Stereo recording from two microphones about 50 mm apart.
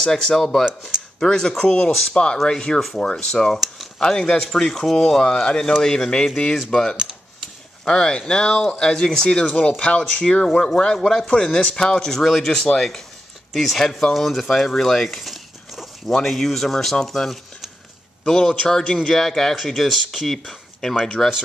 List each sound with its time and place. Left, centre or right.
0.0 s speech: centre
3.5 s a sound: centre
4.0 s speech: centre
9.6 s speech: left
13.5 s speech: centre
16.1 s a man's voice: centre